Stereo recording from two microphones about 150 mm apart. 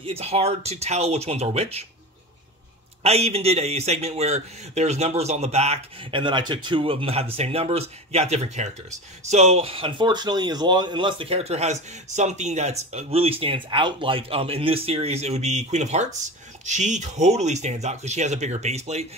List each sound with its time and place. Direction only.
0.0 s a man's voice: 40° right (ahead or behind)
3.0 s a man's voice: 45° right (ahead or behind)